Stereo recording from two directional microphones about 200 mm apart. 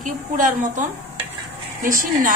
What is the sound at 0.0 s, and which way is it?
A woman's voice, 40° right (ahead or behind).